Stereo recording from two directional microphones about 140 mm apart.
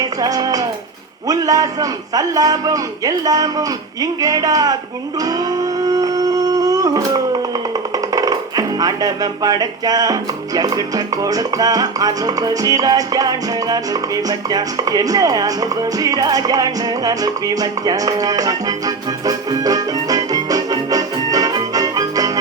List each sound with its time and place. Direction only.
0.2 s music: 25° right (ahead or behind)
1.3 s a man's voice: 25° right (ahead or behind)
5.2 s music: 25° right (ahead or behind)